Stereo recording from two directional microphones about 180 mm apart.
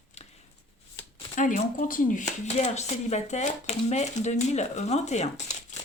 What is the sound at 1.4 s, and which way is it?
A woman's voice, 45° left (ahead or behind).